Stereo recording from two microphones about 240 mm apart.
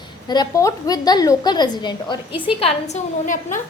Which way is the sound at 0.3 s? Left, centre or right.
Centre.